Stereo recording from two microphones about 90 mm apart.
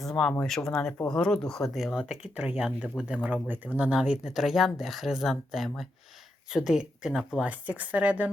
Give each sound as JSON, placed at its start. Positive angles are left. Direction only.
{"t": 0.0, "sound": "speech", "side_deg": 10}
{"t": 2.0, "sound": "speech", "side_deg": -10}
{"t": 7.7, "sound": "speech", "side_deg": -15}